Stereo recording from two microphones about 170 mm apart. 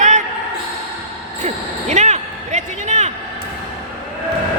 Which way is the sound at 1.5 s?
40° right (ahead or behind).